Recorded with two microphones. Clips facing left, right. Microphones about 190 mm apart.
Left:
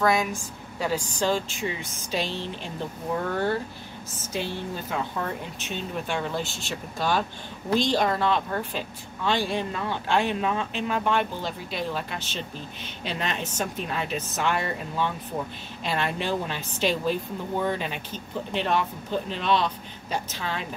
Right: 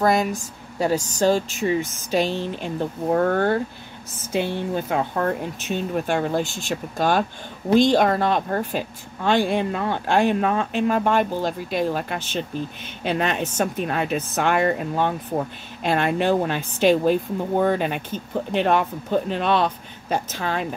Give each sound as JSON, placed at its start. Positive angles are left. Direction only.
{"t": 0.0, "sound": "speech", "side_deg": -40}